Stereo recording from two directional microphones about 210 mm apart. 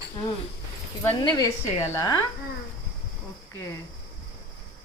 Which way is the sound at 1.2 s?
20° left (ahead or behind).